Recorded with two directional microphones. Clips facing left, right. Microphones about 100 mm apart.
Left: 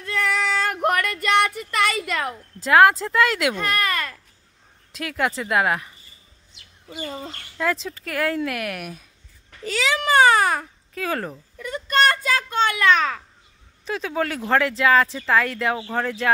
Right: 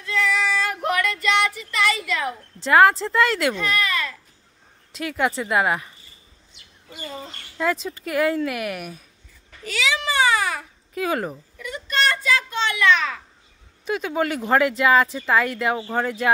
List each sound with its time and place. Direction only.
0.7 s a sound: 50° left (ahead or behind)
2.6 s speech: centre (ahead or behind)
3.5 s speech: 45° left (ahead or behind)
4.9 s speech: centre (ahead or behind)
7.5 s speech: centre (ahead or behind)
9.7 s baby cry: 40° left (ahead or behind)
11.0 s speech: 5° right (ahead or behind)
11.6 s a sound: 45° left (ahead or behind)
13.8 s speech: 5° right (ahead or behind)